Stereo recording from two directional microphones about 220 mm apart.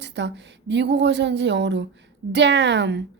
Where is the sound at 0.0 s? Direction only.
55° right (ahead or behind).